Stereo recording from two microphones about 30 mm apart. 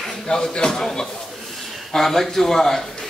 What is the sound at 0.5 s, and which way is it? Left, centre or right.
Speech, left.